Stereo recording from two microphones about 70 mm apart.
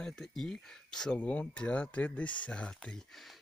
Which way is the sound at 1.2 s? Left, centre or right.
Centre.